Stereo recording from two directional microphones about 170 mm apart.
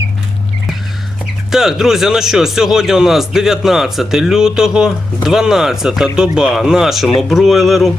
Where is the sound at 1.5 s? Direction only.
Centre (ahead or behind).